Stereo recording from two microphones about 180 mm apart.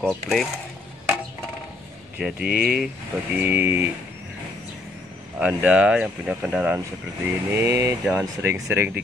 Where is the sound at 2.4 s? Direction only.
55° right (ahead or behind).